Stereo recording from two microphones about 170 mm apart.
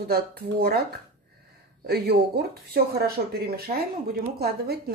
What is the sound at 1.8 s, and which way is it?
Speech, 70° right (ahead or behind).